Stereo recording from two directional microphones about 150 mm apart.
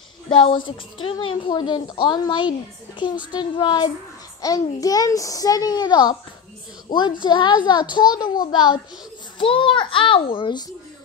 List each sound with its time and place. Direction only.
0.3 s a woman's voice: 30° left (ahead or behind)